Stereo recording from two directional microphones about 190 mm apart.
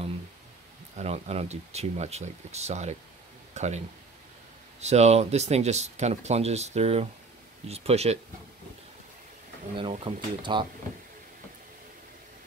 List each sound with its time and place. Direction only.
0.9 s speech: 35° right (ahead or behind)
9.8 s speech: 30° right (ahead or behind)